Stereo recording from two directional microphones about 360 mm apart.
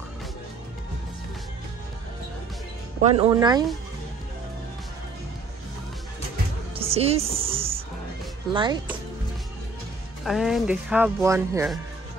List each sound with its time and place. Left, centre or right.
3.0 s speech: centre
6.7 s music: centre
8.5 s speech: centre
10.2 s speech: centre